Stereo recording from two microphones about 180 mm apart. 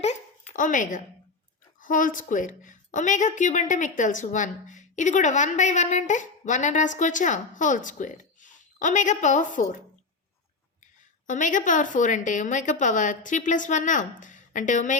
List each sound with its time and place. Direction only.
0.5 s a woman's voice: 45° left (ahead or behind)
11.3 s a woman's voice: 45° left (ahead or behind)